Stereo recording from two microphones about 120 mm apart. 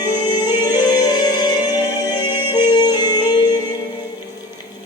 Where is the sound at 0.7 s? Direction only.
35° left (ahead or behind).